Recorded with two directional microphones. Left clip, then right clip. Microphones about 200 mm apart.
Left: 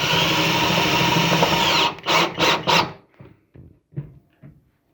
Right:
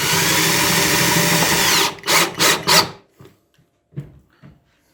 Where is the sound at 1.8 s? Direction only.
40° right (ahead or behind).